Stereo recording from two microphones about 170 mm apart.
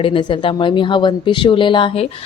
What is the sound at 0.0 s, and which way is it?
A woman's voice, 30° left (ahead or behind).